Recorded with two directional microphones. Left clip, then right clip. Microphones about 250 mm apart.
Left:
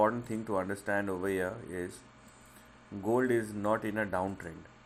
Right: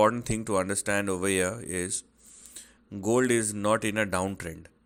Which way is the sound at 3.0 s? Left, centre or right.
Right.